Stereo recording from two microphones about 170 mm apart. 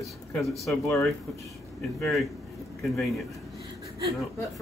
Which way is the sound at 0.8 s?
15° left (ahead or behind).